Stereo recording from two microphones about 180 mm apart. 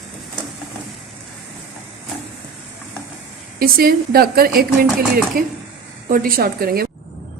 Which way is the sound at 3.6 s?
55° right (ahead or behind).